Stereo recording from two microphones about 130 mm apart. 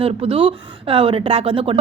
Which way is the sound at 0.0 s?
45° right (ahead or behind).